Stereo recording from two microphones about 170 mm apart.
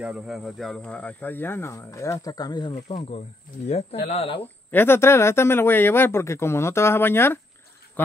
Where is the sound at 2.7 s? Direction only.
35° left (ahead or behind).